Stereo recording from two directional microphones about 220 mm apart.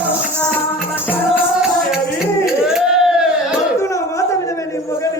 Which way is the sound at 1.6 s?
Centre (ahead or behind).